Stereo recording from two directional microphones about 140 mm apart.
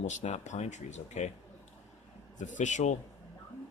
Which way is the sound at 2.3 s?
60° left (ahead or behind).